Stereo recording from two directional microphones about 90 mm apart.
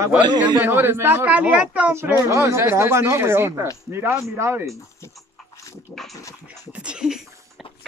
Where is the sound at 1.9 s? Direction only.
30° right (ahead or behind).